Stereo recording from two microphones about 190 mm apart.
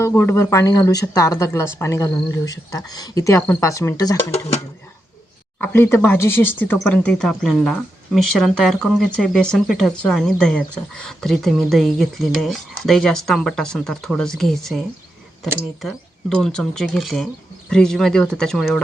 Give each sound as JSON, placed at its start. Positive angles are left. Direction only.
{"t": 0.0, "sound": "a woman's voice", "side_deg": 15}
{"t": 4.3, "sound": "speech", "side_deg": 30}
{"t": 5.5, "sound": "a woman's voice", "side_deg": 10}